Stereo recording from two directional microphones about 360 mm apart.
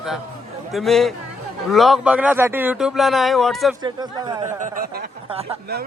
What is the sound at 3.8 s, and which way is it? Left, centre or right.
Speech, centre.